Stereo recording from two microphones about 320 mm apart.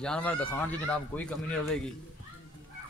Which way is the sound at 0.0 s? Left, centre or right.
Centre.